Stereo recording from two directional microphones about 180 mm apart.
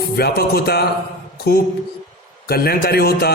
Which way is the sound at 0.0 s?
60° left (ahead or behind).